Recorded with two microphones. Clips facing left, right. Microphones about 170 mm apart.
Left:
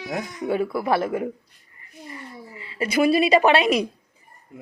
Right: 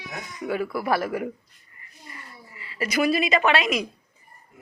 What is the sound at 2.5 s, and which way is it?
A woman's voice, 25° left (ahead or behind).